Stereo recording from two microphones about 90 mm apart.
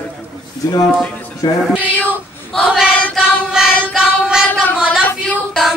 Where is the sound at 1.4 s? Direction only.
55° left (ahead or behind).